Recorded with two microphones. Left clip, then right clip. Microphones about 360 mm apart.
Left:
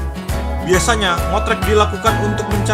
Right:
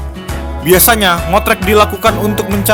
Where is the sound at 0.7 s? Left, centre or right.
Right.